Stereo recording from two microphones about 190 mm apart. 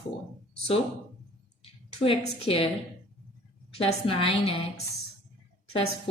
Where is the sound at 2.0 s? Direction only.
30° left (ahead or behind).